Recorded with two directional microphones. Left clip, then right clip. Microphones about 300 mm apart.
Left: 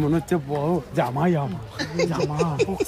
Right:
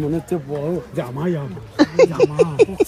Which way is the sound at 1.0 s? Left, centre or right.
Centre.